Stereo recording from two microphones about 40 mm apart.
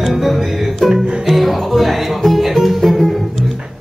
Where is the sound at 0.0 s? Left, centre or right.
Centre.